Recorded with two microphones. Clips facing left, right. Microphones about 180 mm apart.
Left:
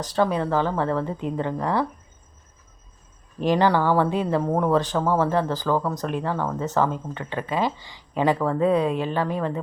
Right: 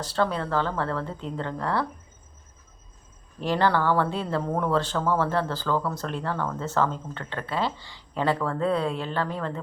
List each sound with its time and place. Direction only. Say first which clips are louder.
0.0 s speech: left 4 dB; 15° left (ahead or behind)
3.4 s speech: left 3 dB; 15° left (ahead or behind)